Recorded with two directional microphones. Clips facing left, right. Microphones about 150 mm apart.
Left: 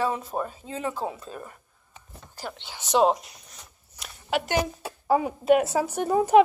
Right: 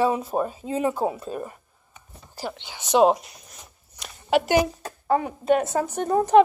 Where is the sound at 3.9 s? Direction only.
5° left (ahead or behind).